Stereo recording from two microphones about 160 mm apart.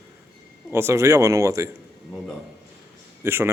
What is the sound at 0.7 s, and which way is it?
A man's voice, 15° right (ahead or behind).